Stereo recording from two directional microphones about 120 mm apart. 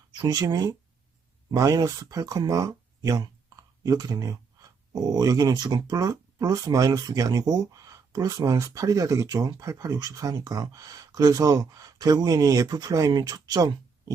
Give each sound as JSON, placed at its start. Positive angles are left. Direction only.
{"t": 0.2, "sound": "speech", "side_deg": -30}